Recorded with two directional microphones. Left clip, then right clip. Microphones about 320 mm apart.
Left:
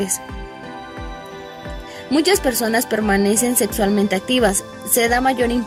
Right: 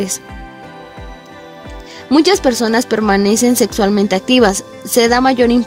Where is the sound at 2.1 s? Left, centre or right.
Right.